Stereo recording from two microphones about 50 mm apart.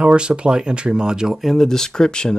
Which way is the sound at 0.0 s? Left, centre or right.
Centre.